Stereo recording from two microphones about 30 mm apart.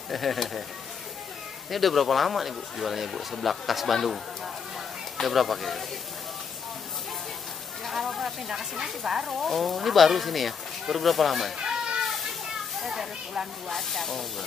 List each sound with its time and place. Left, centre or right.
0.1 s speech: centre
1.7 s speech: centre
5.2 s speech: centre
7.8 s a sound: centre
8.2 s speech: centre
9.4 s speech: centre
11.5 s children playing: right
12.9 s speech: centre
13.7 s speech: centre